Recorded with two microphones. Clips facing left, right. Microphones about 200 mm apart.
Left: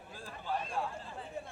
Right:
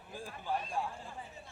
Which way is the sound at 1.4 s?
55° left (ahead or behind).